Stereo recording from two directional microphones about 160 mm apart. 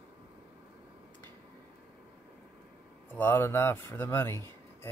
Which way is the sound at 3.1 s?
10° left (ahead or behind).